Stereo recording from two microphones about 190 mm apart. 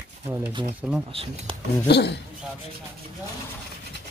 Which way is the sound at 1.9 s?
60° left (ahead or behind).